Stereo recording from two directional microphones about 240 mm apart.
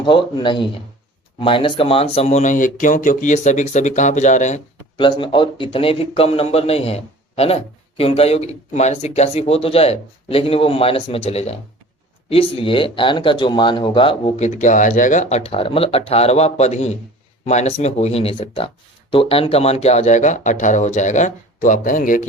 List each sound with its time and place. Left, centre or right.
0.0 s speech: left